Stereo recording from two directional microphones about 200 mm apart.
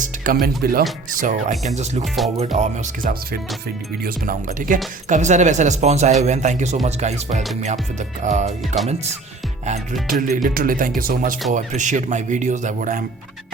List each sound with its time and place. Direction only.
0.4 s speech: 50° right (ahead or behind)